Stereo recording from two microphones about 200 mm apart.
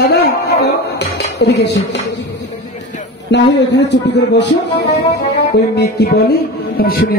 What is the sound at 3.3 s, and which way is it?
Speech, 60° left (ahead or behind).